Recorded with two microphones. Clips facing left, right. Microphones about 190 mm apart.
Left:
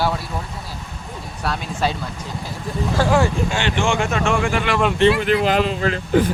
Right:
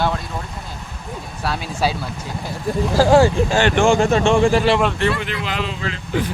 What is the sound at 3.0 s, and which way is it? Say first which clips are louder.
Speech: right 5 dB; 30° right (ahead or behind).